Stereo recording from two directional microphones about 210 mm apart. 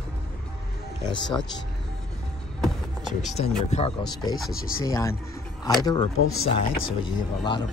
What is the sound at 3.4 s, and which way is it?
Speech, 30° left (ahead or behind).